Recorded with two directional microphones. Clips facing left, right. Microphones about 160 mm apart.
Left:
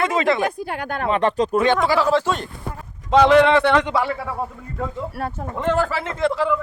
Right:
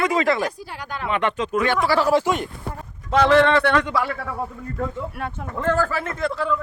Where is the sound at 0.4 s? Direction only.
55° left (ahead or behind).